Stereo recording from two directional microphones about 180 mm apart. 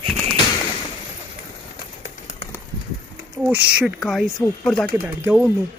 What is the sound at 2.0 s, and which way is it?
Run, 40° left (ahead or behind).